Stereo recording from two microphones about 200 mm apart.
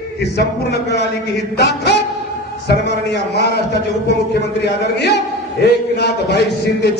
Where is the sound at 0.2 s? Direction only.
55° left (ahead or behind).